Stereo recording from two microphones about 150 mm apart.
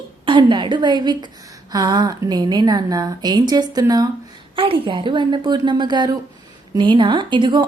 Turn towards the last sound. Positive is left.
turn(degrees=-30)  # may be behind; listen again after turning